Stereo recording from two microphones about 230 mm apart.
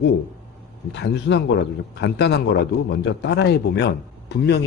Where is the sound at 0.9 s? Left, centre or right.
Left.